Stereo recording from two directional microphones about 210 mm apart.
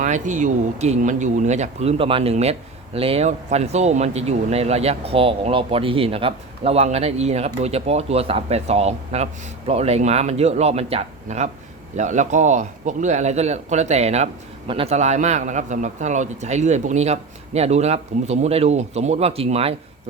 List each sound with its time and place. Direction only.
0.0 s speech: 35° right (ahead or behind)